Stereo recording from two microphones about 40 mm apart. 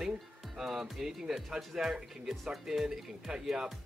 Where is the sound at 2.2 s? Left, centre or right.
Centre.